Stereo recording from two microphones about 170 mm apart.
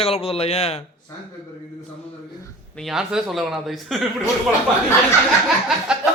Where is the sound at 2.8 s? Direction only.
Centre (ahead or behind).